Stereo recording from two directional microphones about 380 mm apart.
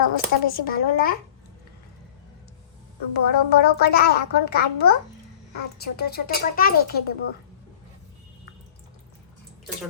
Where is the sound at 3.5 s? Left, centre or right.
Left.